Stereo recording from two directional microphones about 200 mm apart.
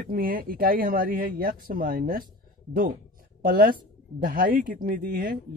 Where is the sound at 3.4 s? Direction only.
45° right (ahead or behind).